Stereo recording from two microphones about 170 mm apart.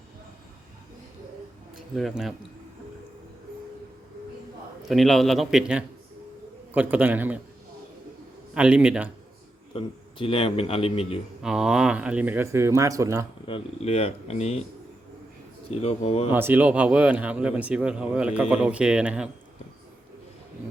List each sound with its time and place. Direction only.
2.0 s a man's voice: centre (ahead or behind)
4.9 s a man's voice: centre (ahead or behind)
8.5 s speech: 5° right (ahead or behind)
9.7 s a man's voice: 30° left (ahead or behind)
11.4 s speech: 5° right (ahead or behind)
13.5 s a man's voice: 35° left (ahead or behind)
15.7 s a man's voice: 35° left (ahead or behind)
16.3 s speech: 10° right (ahead or behind)